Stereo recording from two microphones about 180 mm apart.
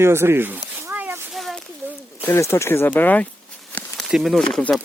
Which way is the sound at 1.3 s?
Centre (ahead or behind).